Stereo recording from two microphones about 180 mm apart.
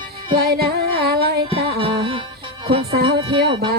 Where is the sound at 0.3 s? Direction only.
60° right (ahead or behind).